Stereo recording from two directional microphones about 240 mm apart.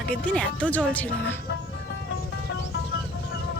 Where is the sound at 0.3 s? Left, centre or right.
Centre.